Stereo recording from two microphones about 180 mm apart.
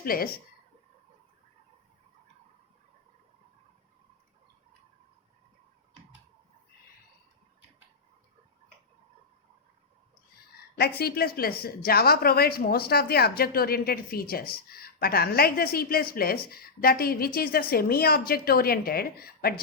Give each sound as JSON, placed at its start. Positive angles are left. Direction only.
{"t": 0.0, "sound": "a woman's voice", "side_deg": 55}
{"t": 10.8, "sound": "a woman's voice", "side_deg": 60}